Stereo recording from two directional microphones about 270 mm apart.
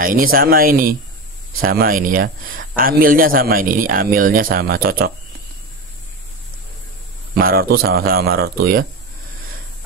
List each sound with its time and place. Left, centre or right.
0.0 s speech: right
7.3 s speech: right